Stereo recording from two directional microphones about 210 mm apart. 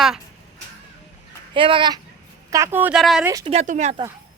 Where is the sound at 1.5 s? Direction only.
25° right (ahead or behind).